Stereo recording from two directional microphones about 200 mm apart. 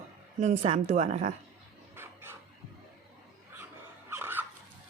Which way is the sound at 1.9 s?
10° right (ahead or behind).